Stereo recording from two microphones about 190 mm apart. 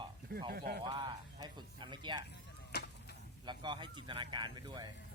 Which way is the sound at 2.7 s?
60° left (ahead or behind).